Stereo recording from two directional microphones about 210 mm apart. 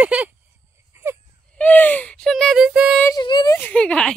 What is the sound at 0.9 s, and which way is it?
Baby cry, 10° right (ahead or behind).